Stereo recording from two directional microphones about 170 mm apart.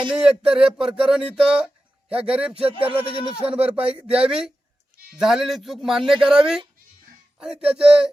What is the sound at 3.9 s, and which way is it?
Speech, 5° right (ahead or behind).